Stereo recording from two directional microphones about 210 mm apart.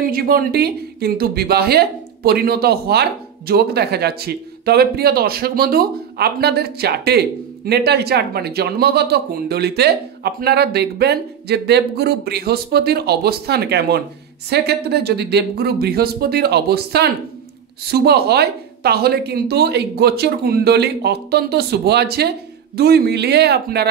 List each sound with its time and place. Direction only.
0.0 s speech: 45° right (ahead or behind)